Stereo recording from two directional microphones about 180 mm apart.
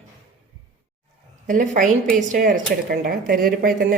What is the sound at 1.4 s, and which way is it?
Speech, 45° right (ahead or behind).